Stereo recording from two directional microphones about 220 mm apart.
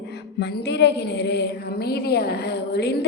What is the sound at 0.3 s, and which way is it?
A woman's voice, 50° left (ahead or behind).